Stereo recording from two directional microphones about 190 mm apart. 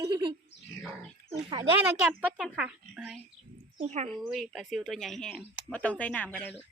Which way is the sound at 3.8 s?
40° right (ahead or behind).